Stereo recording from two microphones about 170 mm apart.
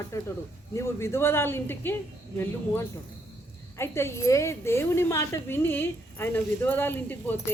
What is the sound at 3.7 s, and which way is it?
Speech, 15° left (ahead or behind).